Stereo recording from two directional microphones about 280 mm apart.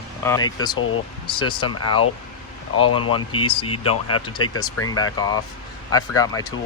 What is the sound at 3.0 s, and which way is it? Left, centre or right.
Speech, centre.